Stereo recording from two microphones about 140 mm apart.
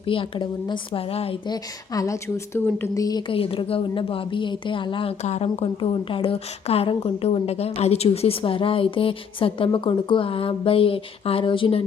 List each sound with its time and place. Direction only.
0.0 s speech: 40° left (ahead or behind)
1.5 s speech: 25° left (ahead or behind)
5.2 s speech: 50° left (ahead or behind)